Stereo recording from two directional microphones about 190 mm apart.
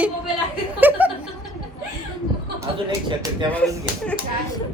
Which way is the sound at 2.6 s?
20° right (ahead or behind).